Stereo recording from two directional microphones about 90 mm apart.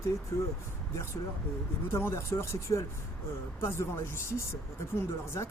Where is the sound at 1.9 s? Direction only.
30° left (ahead or behind).